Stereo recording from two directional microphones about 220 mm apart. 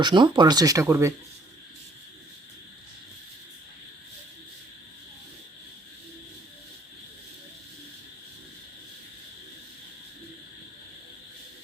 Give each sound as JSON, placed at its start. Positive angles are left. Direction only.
{"t": 0.0, "sound": "speech", "side_deg": -20}